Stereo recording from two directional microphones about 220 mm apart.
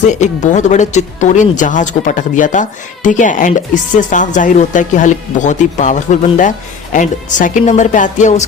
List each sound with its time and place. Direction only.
0.0 s speech: 35° left (ahead or behind)